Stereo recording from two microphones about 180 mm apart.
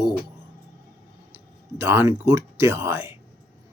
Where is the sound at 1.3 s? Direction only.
15° right (ahead or behind).